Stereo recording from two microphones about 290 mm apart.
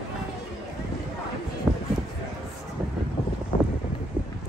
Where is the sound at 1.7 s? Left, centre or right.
Centre.